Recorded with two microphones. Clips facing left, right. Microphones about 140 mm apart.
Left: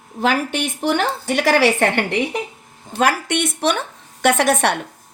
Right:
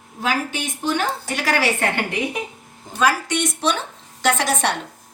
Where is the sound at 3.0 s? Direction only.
60° left (ahead or behind).